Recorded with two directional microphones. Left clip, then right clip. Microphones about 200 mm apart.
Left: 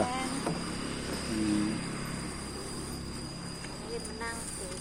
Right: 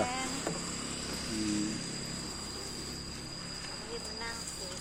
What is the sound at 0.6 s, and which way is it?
Vehicle, 35° left (ahead or behind).